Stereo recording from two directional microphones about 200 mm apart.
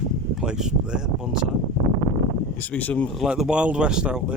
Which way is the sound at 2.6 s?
10° left (ahead or behind).